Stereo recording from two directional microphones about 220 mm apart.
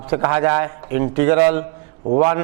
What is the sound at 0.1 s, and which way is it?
A man's voice, 20° right (ahead or behind).